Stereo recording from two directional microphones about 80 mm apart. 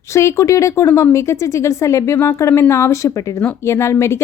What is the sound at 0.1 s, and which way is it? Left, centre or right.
Speech, left.